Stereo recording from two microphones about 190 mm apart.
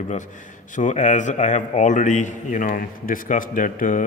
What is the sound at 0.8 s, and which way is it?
A man's voice, 40° left (ahead or behind).